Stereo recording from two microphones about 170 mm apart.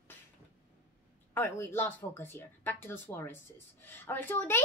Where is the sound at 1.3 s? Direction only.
10° left (ahead or behind).